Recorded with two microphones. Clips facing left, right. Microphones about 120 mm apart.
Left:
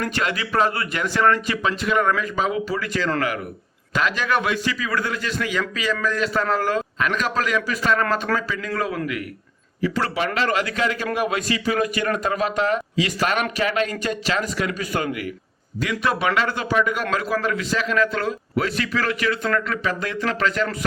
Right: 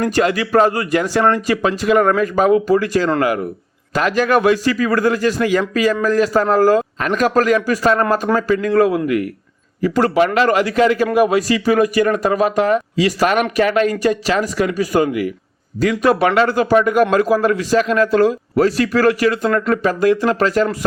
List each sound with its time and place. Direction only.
0.0 s a man's voice: 40° right (ahead or behind)